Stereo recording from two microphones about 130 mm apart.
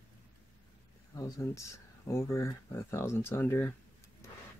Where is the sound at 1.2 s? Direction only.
25° left (ahead or behind).